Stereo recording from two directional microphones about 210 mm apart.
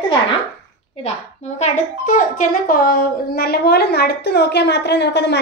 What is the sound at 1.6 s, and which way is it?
A woman's voice, 35° left (ahead or behind).